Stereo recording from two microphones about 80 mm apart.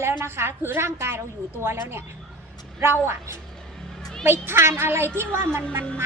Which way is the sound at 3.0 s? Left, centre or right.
Right.